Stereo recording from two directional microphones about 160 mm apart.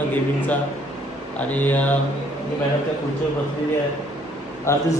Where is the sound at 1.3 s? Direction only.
10° left (ahead or behind).